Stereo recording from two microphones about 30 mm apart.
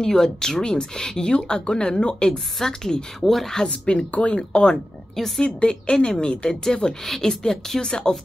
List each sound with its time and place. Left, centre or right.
0.0 s a woman's voice: centre
2.3 s a woman's voice: centre
3.6 s speech: left
4.4 s a woman's voice: left